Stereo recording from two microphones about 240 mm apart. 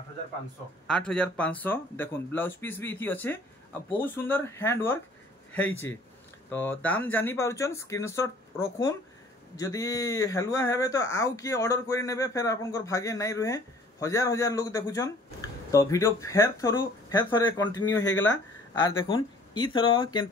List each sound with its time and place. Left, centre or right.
0.8 s speech: centre
6.5 s speech: centre